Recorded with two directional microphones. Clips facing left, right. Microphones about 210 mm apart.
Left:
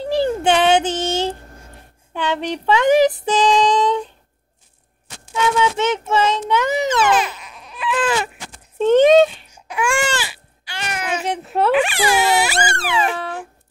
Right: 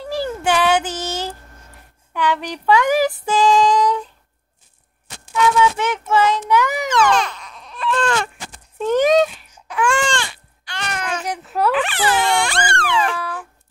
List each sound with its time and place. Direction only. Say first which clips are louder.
0.0 s a sound: left 4 dB; 25° left (ahead or behind)
5.3 s speech: right 2 dB; 25° left (ahead or behind)
6.9 s baby cry: even; 5° left (ahead or behind)
8.7 s speech: left 4 dB; 25° left (ahead or behind)
9.7 s baby cry: right 1 dB; 10° left (ahead or behind)
11.2 s speech: left 2 dB; 25° left (ahead or behind)
11.7 s speech: left 2 dB; 10° left (ahead or behind)
13.1 s a sound: left 1 dB; 25° left (ahead or behind)